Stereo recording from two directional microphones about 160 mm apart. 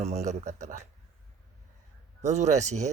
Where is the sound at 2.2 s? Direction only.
45° right (ahead or behind).